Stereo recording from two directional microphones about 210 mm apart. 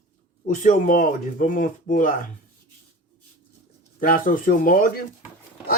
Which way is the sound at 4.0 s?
40° left (ahead or behind).